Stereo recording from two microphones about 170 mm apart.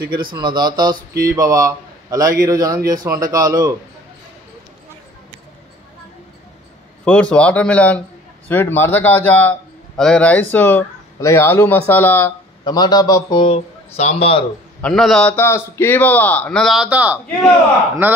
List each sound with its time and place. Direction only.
0.0 s speech: 25° right (ahead or behind)
7.1 s a man's voice: 5° left (ahead or behind)
12.6 s a man's voice: 25° left (ahead or behind)
14.8 s a man's voice: 5° left (ahead or behind)